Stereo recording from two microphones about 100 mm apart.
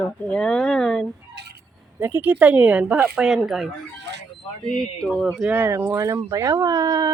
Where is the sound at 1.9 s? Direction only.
20° right (ahead or behind); by 3.6 s centre (ahead or behind).